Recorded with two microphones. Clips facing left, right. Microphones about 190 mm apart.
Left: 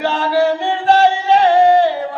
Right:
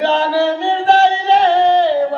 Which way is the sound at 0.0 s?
50° left (ahead or behind).